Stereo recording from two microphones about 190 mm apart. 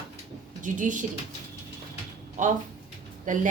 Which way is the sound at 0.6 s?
40° right (ahead or behind).